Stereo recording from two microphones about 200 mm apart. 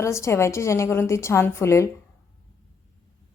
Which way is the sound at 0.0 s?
15° left (ahead or behind).